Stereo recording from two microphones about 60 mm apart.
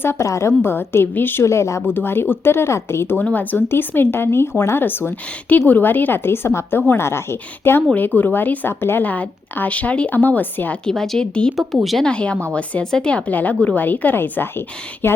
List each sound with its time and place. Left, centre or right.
0.0 s a woman's voice: left
1.5 s speech: left
1.9 s speech: left
3.3 s speech: left
7.9 s speech: left
9.0 s speech: left
10.8 s speech: centre
12.0 s speech: centre; by 15.2 s left